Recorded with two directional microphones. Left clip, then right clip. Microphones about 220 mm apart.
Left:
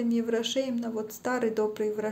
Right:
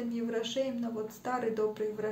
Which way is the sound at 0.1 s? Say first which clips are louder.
Left 5 dB; 50° left (ahead or behind).